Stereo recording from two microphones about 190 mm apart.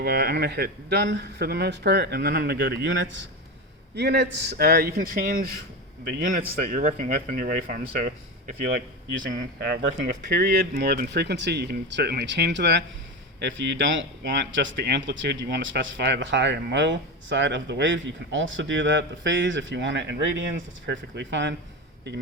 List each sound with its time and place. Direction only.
0.0 s speech: 55° right (ahead or behind); by 3.2 s 75° right (ahead or behind)
3.9 s speech: 60° right (ahead or behind)
6.6 s speech: 45° right (ahead or behind)
9.6 s speech: 55° right (ahead or behind)